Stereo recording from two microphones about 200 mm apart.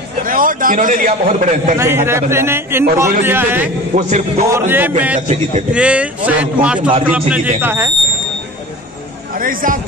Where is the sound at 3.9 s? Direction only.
35° right (ahead or behind).